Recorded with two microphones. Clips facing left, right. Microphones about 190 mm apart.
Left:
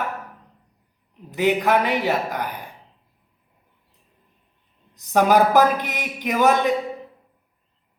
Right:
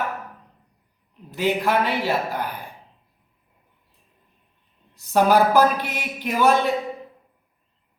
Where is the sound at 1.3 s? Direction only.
15° left (ahead or behind).